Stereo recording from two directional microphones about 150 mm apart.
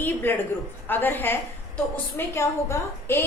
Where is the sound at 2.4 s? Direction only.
15° left (ahead or behind).